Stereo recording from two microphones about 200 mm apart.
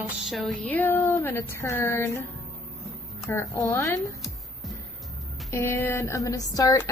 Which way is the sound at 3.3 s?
15° left (ahead or behind).